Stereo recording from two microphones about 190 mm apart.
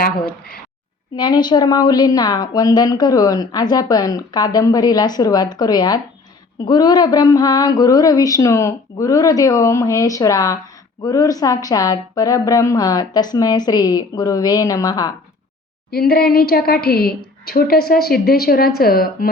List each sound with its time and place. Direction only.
0.3 s a woman's voice: 55° left (ahead or behind)
1.1 s a woman's voice: 20° left (ahead or behind)
15.9 s a woman's voice: 55° left (ahead or behind)